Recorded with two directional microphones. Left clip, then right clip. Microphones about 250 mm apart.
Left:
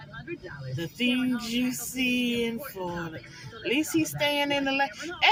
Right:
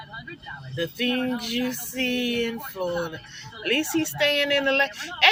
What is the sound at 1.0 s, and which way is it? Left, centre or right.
Music, right.